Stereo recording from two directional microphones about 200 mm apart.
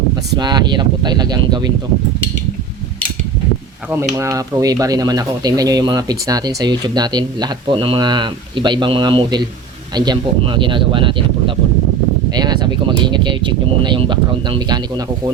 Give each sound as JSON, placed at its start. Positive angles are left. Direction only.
{"t": 0.3, "sound": "speech", "side_deg": -20}
{"t": 3.8, "sound": "speech", "side_deg": -10}